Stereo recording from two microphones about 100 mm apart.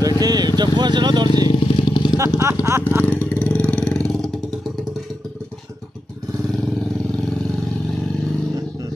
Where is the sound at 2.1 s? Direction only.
30° right (ahead or behind).